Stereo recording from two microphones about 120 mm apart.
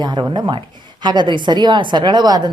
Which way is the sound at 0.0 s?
40° right (ahead or behind).